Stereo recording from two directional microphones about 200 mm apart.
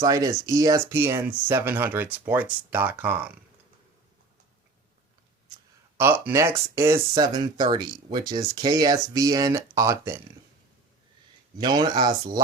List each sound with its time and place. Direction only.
0.0 s speech: 15° right (ahead or behind)
6.0 s speech: 10° right (ahead or behind)
11.5 s speech: 20° right (ahead or behind)